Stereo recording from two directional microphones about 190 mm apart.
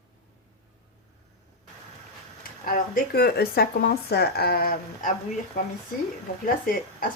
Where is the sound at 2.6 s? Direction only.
50° left (ahead or behind).